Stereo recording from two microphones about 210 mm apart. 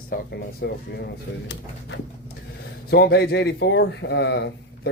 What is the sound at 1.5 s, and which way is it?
Speech, 60° left (ahead or behind).